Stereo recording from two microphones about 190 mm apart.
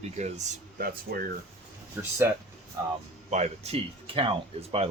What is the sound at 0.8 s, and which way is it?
Speech, 50° right (ahead or behind).